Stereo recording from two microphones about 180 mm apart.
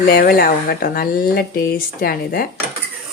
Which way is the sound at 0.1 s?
55° left (ahead or behind).